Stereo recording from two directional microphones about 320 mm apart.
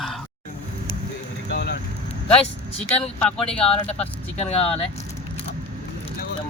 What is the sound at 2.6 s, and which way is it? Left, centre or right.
Speech, centre.